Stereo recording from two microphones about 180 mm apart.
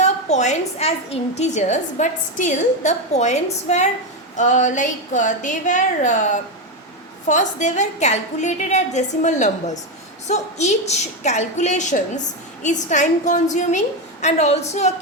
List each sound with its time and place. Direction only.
0.0 s a woman's voice: 40° left (ahead or behind)